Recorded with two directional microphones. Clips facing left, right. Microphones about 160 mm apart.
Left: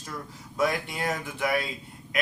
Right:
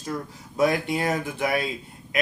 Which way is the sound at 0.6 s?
25° right (ahead or behind).